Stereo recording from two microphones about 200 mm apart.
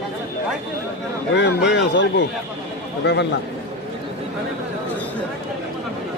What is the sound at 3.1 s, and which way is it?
Speech, 60° left (ahead or behind).